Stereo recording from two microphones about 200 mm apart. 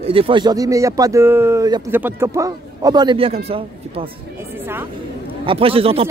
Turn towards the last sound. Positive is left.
turn(degrees=-30)  # may be behind; listen again after turning